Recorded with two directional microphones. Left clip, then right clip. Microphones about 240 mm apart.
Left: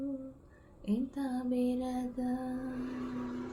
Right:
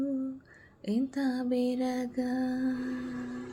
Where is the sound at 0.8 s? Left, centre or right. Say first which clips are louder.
Right 5 dB; right.